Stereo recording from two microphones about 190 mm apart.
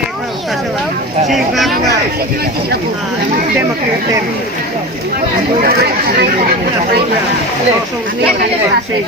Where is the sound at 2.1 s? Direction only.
55° right (ahead or behind).